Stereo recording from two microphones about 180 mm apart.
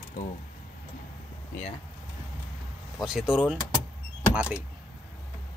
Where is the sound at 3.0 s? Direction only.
Centre (ahead or behind).